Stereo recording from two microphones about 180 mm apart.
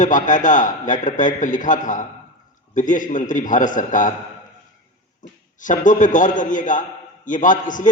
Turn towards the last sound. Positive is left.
turn(degrees=45)  # may be behind; listen again after turning